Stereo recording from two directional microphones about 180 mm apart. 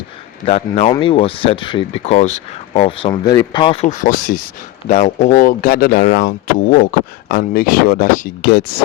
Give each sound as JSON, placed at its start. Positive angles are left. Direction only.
{"t": 0.4, "sound": "speech", "side_deg": 35}
{"t": 3.1, "sound": "speech", "side_deg": 20}
{"t": 4.9, "sound": "speech", "side_deg": 40}